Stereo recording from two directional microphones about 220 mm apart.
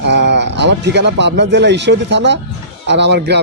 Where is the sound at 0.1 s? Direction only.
50° right (ahead or behind).